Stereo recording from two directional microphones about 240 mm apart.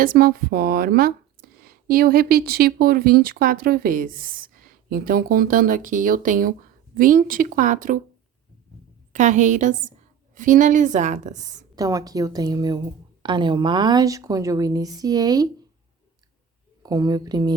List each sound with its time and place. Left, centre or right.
0.0 s speech: right
9.1 s speech: right
11.7 s speech: centre
16.8 s speech: centre